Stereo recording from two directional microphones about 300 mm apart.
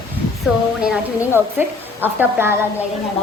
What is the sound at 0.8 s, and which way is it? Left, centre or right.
A woman's voice, centre.